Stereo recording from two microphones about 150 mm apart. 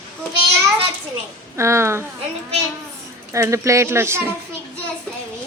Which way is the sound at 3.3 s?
20° right (ahead or behind).